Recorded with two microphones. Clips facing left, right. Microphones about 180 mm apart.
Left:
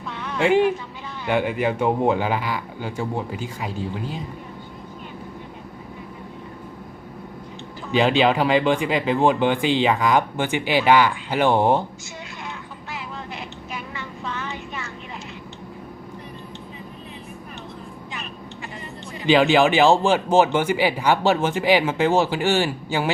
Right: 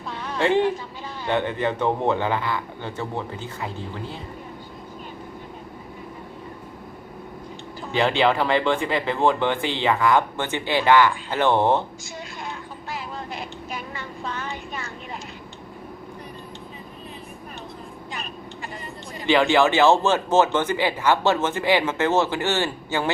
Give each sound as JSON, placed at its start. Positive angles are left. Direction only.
{"t": 0.1, "sound": "a sound", "side_deg": -35}
{"t": 1.3, "sound": "speech", "side_deg": 10}
{"t": 7.9, "sound": "speech", "side_deg": 15}
{"t": 12.9, "sound": "vehicle", "side_deg": -35}
{"t": 19.2, "sound": "speech", "side_deg": 15}